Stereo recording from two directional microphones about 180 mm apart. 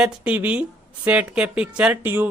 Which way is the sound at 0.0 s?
5° right (ahead or behind).